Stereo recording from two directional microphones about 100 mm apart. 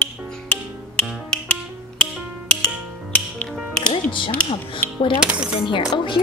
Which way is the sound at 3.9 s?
55° left (ahead or behind).